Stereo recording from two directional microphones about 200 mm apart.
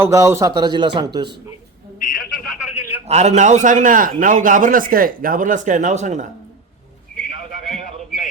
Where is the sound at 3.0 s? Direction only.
35° right (ahead or behind).